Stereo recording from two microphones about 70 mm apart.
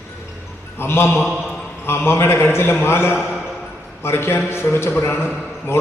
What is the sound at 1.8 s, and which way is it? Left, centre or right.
A man's voice, left.